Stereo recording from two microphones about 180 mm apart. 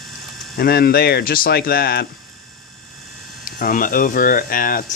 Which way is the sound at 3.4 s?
50° left (ahead or behind).